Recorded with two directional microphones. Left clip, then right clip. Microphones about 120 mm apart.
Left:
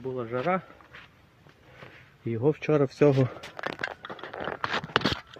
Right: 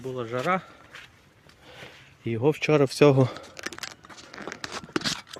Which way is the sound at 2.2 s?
65° right (ahead or behind).